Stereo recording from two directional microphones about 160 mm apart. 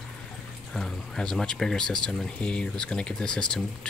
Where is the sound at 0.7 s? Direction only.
5° left (ahead or behind).